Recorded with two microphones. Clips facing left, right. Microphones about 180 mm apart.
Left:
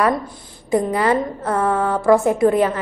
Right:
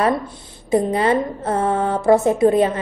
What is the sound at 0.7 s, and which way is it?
A woman's voice, 25° right (ahead or behind).